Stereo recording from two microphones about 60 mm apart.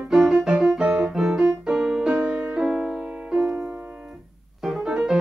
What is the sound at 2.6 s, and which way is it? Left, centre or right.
Music, centre.